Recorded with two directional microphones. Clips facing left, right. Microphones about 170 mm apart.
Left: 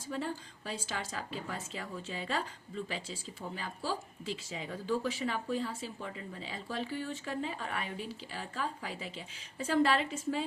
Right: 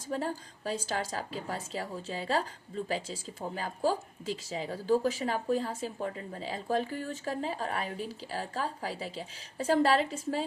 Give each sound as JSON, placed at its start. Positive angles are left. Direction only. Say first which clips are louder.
{"t": 0.1, "sound": "a woman's voice", "louder": "right 4 dB", "side_deg": -40}